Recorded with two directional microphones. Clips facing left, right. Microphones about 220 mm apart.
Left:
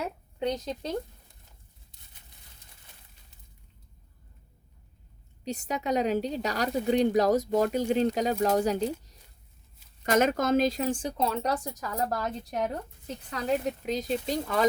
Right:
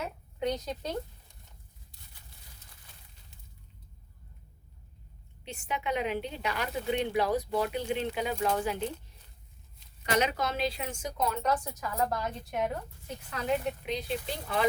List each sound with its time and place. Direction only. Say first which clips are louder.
0.3 s speech: left 1 dB; 30° left (ahead or behind)
1.9 s a sound: right 2 dB; 20° left (ahead or behind)
5.5 s speech: left 5 dB; 40° left (ahead or behind)